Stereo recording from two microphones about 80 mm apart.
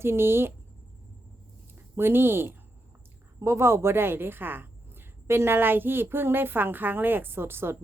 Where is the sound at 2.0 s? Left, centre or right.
Right.